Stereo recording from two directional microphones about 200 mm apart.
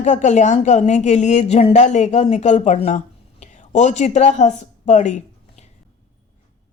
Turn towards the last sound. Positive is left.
turn(degrees=35)  # may be behind; listen again after turning